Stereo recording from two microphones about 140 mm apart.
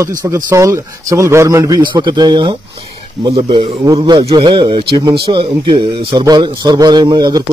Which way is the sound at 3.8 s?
30° right (ahead or behind).